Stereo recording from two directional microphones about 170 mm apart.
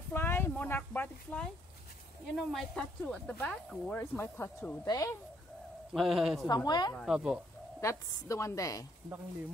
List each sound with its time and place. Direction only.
0.1 s a sound: 15° left (ahead or behind)
2.3 s speech: centre (ahead or behind); by 5.1 s 20° left (ahead or behind)
5.9 s speech: centre (ahead or behind)
6.4 s a woman's voice: 25° left (ahead or behind)
7.0 s speech: 5° right (ahead or behind)
7.8 s speech: 15° left (ahead or behind)